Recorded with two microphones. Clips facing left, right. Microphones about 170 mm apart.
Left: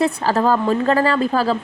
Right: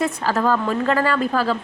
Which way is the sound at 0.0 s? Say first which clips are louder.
Left 3 dB; 35° left (ahead or behind).